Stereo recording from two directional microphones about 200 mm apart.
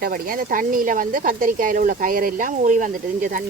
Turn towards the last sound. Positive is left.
turn(degrees=-40)  # may be behind; listen again after turning